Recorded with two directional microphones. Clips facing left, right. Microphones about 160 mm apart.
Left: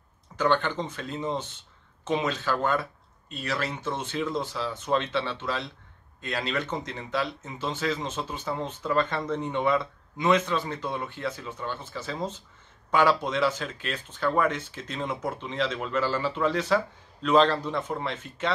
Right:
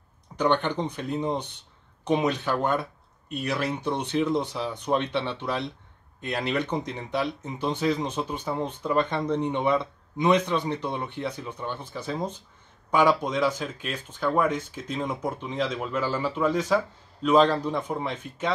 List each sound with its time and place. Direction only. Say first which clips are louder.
0.4 s speech: right 1 dB; 15° right (ahead or behind)